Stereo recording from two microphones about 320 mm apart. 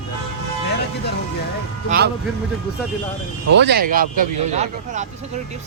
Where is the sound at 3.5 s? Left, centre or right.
Right.